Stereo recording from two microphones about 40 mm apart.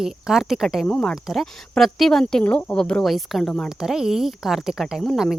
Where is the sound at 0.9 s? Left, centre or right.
Left.